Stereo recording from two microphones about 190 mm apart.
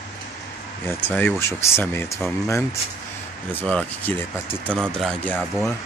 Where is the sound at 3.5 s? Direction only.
10° left (ahead or behind).